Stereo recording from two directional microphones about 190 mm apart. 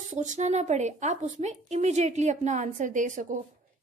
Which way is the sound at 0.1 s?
40° right (ahead or behind).